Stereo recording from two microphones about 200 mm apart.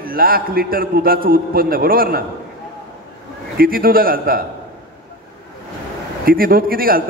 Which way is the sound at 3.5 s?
45° right (ahead or behind).